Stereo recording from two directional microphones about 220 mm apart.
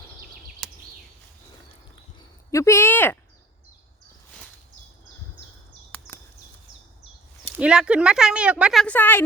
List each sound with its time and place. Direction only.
0.6 s a sound: centre (ahead or behind)
2.5 s speech: 15° left (ahead or behind)
7.6 s a woman's voice: 5° right (ahead or behind)